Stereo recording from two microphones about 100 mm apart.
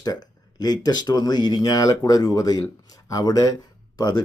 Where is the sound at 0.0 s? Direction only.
40° left (ahead or behind).